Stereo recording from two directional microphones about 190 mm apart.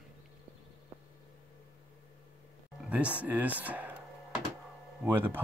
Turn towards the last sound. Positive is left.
turn(degrees=-10)  # may be behind; listen again after turning